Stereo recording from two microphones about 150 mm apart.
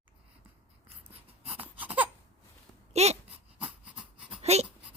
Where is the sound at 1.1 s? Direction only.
40° right (ahead or behind).